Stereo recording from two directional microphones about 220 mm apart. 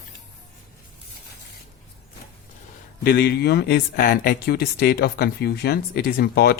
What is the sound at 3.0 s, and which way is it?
Speech, 45° left (ahead or behind).